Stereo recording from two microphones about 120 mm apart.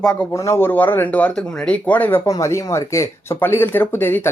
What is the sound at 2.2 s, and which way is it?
Speech, 25° left (ahead or behind).